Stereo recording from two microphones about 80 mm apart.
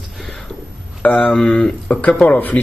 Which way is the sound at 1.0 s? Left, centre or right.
Centre.